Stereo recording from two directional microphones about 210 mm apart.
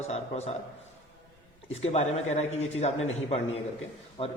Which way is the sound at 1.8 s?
30° left (ahead or behind).